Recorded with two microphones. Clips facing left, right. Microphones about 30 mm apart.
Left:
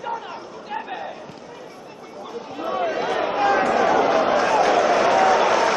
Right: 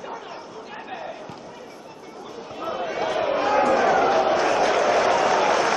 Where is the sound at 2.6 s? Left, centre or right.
Centre.